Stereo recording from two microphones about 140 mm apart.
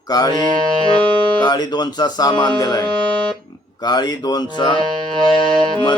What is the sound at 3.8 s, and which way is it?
Music, 30° left (ahead or behind).